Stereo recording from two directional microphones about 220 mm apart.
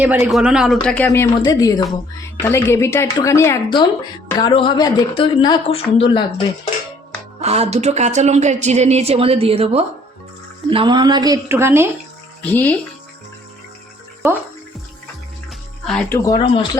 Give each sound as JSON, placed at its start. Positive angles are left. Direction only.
{"t": 0.0, "sound": "speech", "side_deg": -5}
{"t": 7.4, "sound": "a woman's voice", "side_deg": -30}
{"t": 12.4, "sound": "speech", "side_deg": 10}
{"t": 15.8, "sound": "speech", "side_deg": 5}
{"t": 16.1, "sound": "speech", "side_deg": 15}